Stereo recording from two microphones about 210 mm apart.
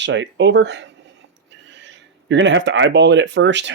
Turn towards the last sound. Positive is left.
turn(degrees=-55)  # may be behind; listen again after turning